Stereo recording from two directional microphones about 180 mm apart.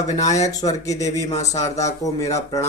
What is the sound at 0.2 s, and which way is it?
Speech, 40° left (ahead or behind).